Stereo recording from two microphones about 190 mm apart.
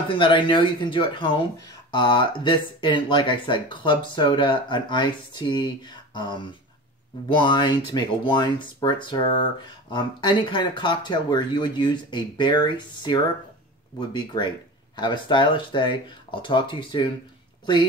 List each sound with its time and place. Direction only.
0.1 s speech: 25° left (ahead or behind)